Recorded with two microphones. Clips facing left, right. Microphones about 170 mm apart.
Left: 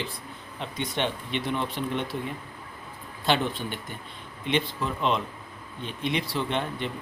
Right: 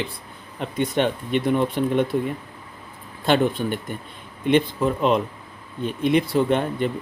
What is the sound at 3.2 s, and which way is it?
Speech, 50° right (ahead or behind).